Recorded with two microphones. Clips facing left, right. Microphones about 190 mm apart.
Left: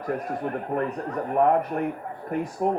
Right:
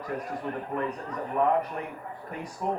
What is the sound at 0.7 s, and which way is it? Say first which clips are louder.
A woman's voice: left 6 dB; 50° left (ahead or behind).